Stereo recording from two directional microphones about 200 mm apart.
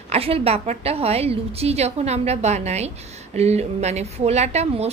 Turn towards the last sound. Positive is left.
turn(degrees=-35)  # may be behind; listen again after turning